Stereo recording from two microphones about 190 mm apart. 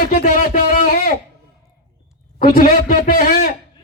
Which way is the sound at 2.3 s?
50° left (ahead or behind).